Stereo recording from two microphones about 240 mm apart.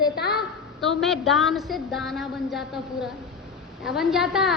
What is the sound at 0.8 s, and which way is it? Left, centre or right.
A woman's voice, centre.